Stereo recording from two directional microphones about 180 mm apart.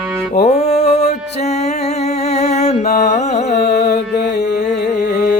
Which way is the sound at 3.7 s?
65° left (ahead or behind).